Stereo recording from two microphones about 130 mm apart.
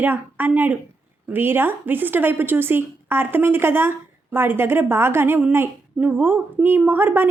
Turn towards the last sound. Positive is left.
turn(degrees=-15)  # may be behind; listen again after turning